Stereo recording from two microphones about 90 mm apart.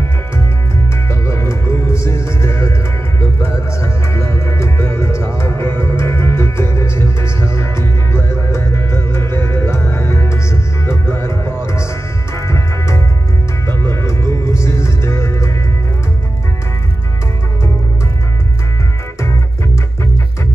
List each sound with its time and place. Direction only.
1.2 s music: 30° left (ahead or behind)